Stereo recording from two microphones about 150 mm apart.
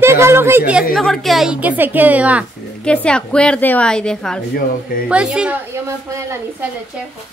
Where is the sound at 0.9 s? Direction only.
Centre (ahead or behind).